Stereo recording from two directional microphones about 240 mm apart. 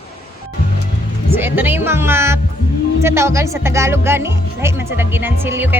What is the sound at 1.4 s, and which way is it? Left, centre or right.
Speech, centre.